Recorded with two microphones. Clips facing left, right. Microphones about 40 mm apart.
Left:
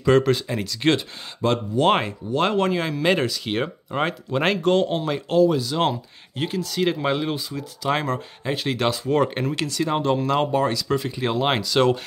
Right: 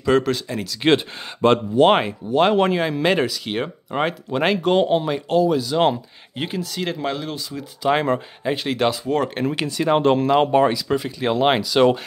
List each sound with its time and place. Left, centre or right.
0.0 s speech: centre
1.4 s speech: right
1.8 s speech: centre
3.1 s speech: centre
4.7 s speech: centre
5.1 s speech: centre
7.8 s speech: centre
9.5 s speech: centre
10.7 s speech: centre